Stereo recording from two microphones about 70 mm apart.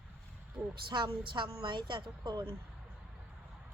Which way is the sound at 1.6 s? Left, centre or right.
Right.